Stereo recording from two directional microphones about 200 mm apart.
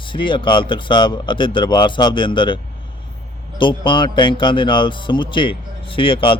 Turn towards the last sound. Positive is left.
turn(degrees=25)  # may be behind; listen again after turning